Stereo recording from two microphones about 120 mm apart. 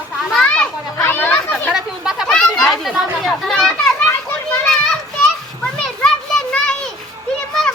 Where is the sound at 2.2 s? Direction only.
5° left (ahead or behind).